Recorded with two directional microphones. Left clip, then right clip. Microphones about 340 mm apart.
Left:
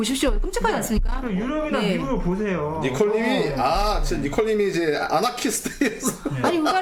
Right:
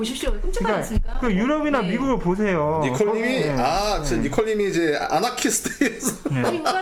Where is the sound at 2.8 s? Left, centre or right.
Right.